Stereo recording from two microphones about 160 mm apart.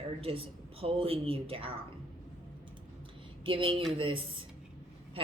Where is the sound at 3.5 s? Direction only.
35° right (ahead or behind).